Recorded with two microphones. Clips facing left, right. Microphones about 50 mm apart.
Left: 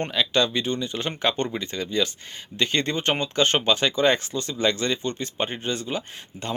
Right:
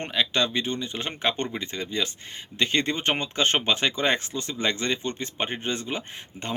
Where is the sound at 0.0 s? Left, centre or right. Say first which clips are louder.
Left 2 dB; centre.